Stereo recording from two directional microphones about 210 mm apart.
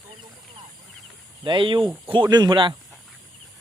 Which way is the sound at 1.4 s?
25° right (ahead or behind).